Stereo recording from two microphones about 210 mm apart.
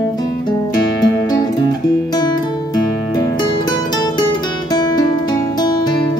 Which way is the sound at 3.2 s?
20° left (ahead or behind).